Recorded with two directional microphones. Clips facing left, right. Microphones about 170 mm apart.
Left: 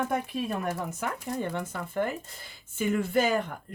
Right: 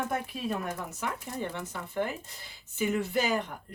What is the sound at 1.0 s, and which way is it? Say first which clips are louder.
Speech: left 2 dB; 50° left (ahead or behind).